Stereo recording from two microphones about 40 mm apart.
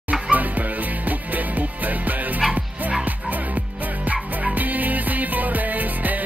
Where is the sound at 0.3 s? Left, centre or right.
Right.